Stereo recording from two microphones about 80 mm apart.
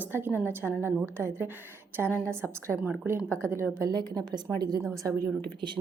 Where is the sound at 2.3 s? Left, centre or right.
Right.